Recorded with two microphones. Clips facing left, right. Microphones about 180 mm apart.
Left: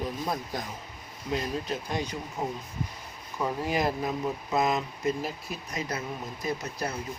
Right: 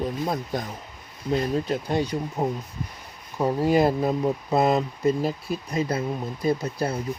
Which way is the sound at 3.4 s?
30° right (ahead or behind).